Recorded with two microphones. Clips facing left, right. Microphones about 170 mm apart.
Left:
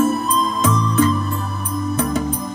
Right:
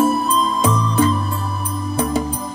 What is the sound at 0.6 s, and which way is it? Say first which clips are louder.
Music: left 2 dB; 30° right (ahead or behind).